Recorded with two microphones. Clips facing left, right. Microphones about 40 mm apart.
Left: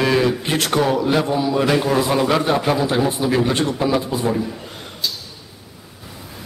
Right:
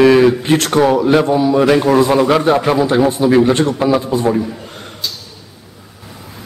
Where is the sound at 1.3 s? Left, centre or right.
Centre.